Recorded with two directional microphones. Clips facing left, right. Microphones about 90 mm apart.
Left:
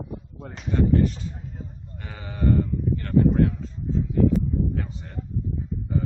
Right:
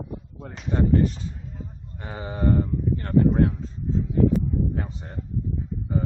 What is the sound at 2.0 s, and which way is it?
Sheep, 30° right (ahead or behind).